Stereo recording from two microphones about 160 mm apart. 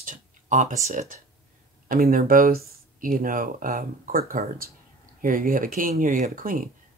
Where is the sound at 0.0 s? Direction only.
55° right (ahead or behind).